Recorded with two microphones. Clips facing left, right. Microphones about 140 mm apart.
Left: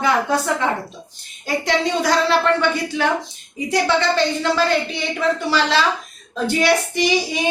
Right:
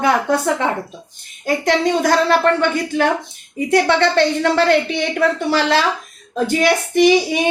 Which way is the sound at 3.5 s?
60° right (ahead or behind).